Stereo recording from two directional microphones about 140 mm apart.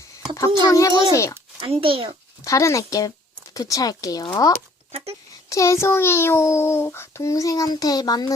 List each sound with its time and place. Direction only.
0.7 s a child's voice: 25° left (ahead or behind)
1.6 s a child's voice: 40° right (ahead or behind)
2.4 s a child's voice: 20° left (ahead or behind)
4.9 s a sound: 45° right (ahead or behind)
5.5 s a child's voice: 20° left (ahead or behind)